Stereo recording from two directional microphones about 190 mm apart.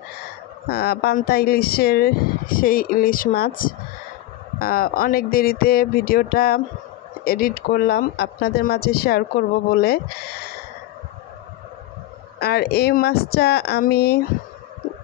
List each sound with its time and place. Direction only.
0.7 s speech: 55° left (ahead or behind)
12.4 s speech: 55° left (ahead or behind)